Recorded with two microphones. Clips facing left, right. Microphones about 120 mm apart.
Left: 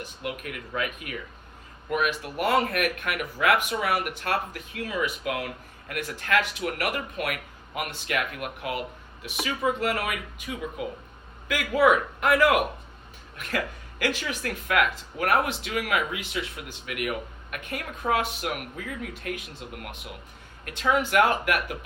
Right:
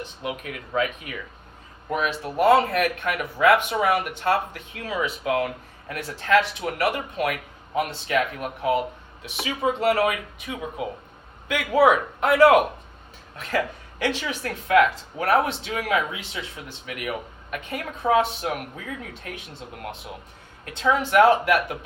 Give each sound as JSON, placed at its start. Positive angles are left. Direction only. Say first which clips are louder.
{"t": 0.0, "sound": "speech", "louder": "right 3 dB", "side_deg": -25}
{"t": 1.9, "sound": "speech", "louder": "right 1 dB", "side_deg": -30}
{"t": 14.0, "sound": "speech", "louder": "right 2 dB", "side_deg": -30}